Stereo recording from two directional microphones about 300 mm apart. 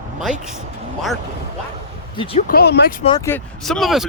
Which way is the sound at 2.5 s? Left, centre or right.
Left.